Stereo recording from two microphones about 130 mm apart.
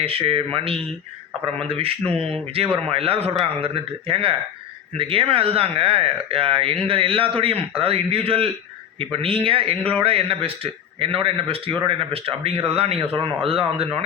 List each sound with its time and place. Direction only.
0.0 s speech: 45° right (ahead or behind)